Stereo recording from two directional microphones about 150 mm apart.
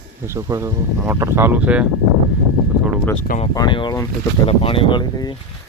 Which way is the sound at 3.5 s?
30° left (ahead or behind).